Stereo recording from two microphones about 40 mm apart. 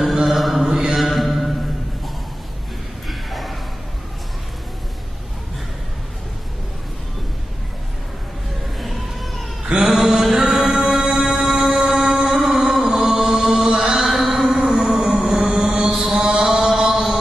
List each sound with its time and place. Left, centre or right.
0.3 s chant: centre
0.6 s mantra: centre
3.1 s a sound: centre
8.7 s music: centre
9.7 s mantra: centre
10.3 s music: centre
12.3 s chant: centre
14.6 s music: centre
16.4 s chant: centre
16.9 s chant: centre